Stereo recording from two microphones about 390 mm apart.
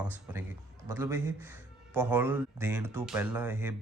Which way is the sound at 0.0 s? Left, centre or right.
Centre.